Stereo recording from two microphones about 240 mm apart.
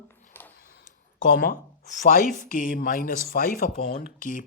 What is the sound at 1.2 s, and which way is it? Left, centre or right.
Speech, left.